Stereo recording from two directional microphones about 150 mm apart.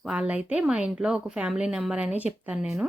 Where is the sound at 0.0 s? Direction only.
5° right (ahead or behind).